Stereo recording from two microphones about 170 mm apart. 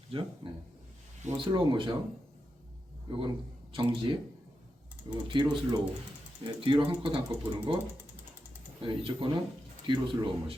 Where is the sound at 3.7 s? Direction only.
30° right (ahead or behind).